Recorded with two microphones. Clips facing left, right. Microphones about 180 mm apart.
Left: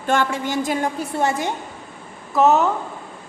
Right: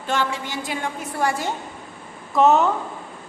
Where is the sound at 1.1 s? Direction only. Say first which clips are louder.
Left 1 dB; 20° left (ahead or behind).